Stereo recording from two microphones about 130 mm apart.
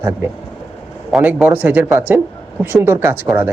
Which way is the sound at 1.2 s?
10° right (ahead or behind).